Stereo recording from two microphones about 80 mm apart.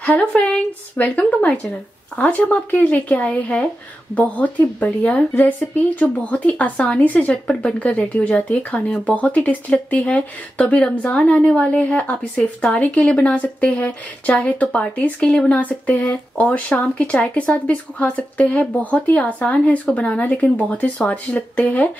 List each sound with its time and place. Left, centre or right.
0.0 s a woman's voice: centre